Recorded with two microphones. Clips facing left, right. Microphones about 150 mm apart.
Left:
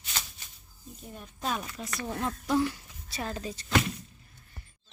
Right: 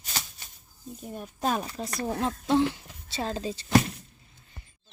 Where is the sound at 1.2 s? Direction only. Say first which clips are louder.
Right 5 dB; 45° right (ahead or behind).